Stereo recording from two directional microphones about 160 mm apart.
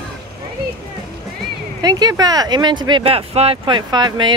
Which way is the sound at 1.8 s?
25° right (ahead or behind).